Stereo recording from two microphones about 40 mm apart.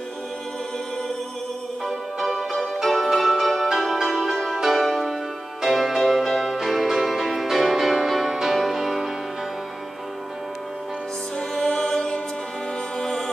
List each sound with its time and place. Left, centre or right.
1.9 s music: centre
11.3 s music: left